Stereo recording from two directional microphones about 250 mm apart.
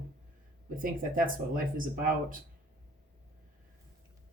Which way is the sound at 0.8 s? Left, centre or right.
Right.